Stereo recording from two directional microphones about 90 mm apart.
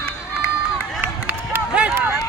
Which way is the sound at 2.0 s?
25° right (ahead or behind).